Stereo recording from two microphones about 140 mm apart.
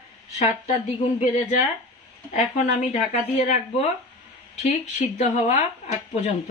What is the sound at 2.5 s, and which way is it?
Speech, 55° left (ahead or behind).